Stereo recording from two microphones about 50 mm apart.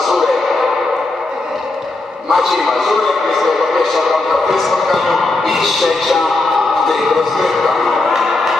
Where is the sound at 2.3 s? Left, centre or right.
Centre.